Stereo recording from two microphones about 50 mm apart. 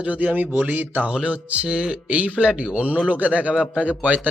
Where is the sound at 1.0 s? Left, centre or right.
Right.